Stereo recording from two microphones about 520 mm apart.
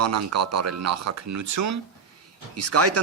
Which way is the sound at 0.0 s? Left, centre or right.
Right.